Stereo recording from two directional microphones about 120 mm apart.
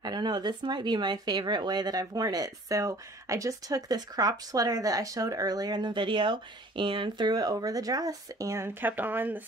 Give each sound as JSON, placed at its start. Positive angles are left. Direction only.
{"t": 0.0, "sound": "speech", "side_deg": -35}